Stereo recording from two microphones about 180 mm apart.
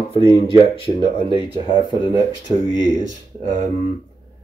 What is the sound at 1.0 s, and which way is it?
Speech, 25° left (ahead or behind).